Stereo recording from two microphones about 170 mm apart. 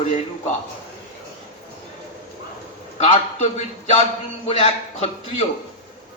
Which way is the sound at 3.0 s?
45° left (ahead or behind).